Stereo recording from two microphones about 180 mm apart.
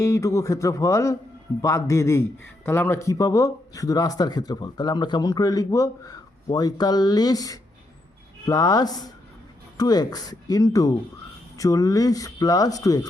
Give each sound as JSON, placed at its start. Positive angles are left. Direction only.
{"t": 0.0, "sound": "speech", "side_deg": 15}